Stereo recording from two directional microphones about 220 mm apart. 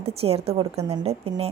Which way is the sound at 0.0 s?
25° right (ahead or behind).